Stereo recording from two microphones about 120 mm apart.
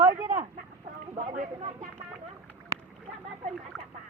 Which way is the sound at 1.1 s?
80° right.